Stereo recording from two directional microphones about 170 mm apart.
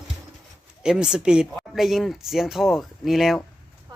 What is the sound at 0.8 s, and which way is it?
Speech, 5° right (ahead or behind).